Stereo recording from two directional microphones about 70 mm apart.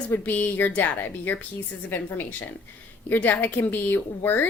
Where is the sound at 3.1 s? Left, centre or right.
Left.